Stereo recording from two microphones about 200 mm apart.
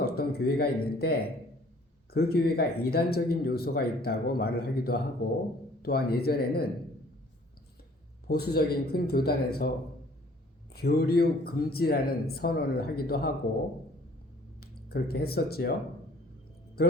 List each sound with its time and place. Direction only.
0.0 s a man's voice: 50° left (ahead or behind)
8.3 s a man's voice: 50° left (ahead or behind)
10.7 s a man's voice: 50° left (ahead or behind)
14.6 s speech: 50° left (ahead or behind)